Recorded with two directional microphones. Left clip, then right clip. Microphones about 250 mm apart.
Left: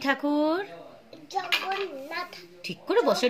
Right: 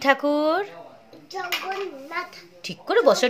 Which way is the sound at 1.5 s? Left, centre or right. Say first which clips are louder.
Left 1 dB; centre.